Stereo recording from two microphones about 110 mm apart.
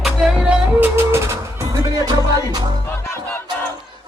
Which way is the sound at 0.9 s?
25° right (ahead or behind).